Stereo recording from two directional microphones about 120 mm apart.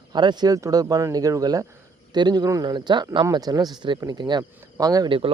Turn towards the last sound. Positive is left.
turn(degrees=-30)  # may be behind; listen again after turning